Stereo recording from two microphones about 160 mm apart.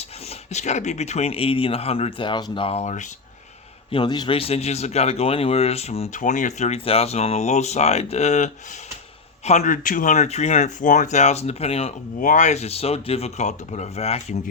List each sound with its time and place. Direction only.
0.5 s speech: 45° left (ahead or behind)
3.9 s speech: 25° left (ahead or behind); by 8.4 s 45° left (ahead or behind)
9.5 s speech: 50° left (ahead or behind)
12.2 s speech: 50° left (ahead or behind)